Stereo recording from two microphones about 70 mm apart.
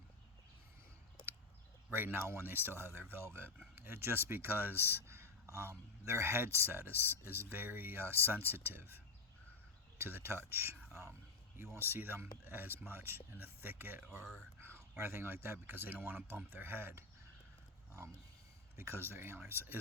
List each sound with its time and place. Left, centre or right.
1.9 s speech: right
4.8 s a sound: right
5.5 s speech: right
10.0 s a man's voice: right
18.8 s speech: right